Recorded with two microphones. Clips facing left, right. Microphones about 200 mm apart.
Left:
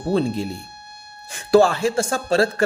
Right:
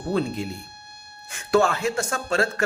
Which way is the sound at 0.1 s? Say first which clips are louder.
Left 4 dB; 30° left (ahead or behind).